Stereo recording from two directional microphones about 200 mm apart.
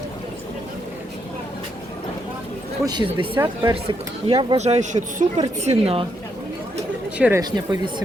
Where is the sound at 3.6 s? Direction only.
25° right (ahead or behind).